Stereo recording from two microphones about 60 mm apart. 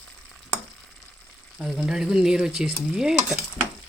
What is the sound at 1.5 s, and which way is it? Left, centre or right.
Speech, centre.